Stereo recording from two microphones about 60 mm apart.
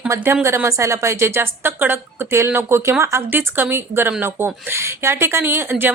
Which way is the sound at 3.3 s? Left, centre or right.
Right.